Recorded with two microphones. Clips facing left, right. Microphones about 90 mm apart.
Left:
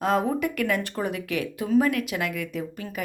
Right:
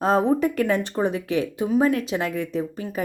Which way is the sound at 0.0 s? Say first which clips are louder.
Right 4 dB; 30° right (ahead or behind).